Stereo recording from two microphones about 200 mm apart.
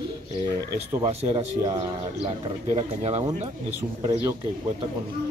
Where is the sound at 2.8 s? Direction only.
30° right (ahead or behind).